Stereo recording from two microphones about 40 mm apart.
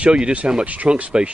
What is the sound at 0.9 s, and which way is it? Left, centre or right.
Speech, right.